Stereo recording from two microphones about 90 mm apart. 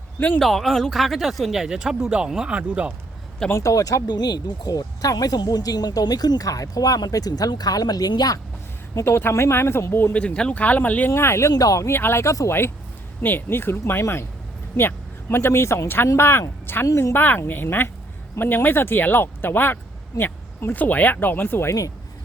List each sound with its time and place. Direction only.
0.3 s speech: centre (ahead or behind); by 2.9 s 15° right (ahead or behind)
3.5 s speech: 35° left (ahead or behind)
9.0 s speech: 25° left (ahead or behind)
11.1 s speech: 30° left (ahead or behind)